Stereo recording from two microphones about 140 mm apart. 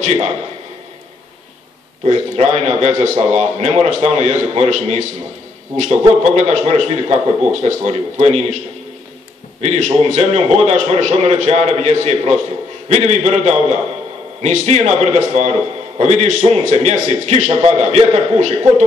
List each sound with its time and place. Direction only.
0.0 s a man's voice: 55° right (ahead or behind)
2.0 s a man's voice: 50° right (ahead or behind)
6.2 s a man's voice: 55° right (ahead or behind)
9.6 s a man's voice: 55° right (ahead or behind)